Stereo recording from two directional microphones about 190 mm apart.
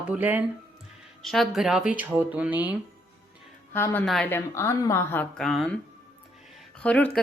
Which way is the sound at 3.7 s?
10° left (ahead or behind).